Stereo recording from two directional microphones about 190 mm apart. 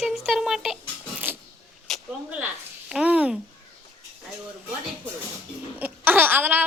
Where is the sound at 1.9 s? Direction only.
Centre (ahead or behind).